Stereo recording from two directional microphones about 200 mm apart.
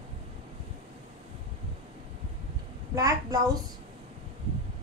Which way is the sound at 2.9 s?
15° right (ahead or behind).